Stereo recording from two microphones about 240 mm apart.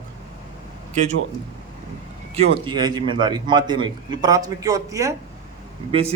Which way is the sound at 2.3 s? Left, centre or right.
Right.